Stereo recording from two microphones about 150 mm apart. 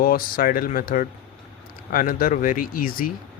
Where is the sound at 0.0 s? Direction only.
75° left (ahead or behind).